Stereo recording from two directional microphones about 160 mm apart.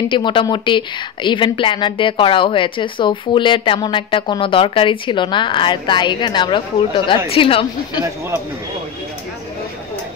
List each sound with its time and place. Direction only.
0.1 s a woman's voice: 30° left (ahead or behind)